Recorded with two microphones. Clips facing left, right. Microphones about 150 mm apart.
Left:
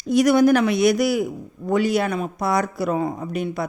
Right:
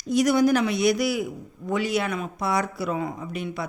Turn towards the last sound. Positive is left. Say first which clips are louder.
# left 5 dB
turn(degrees=40)  # may be behind; listen again after turning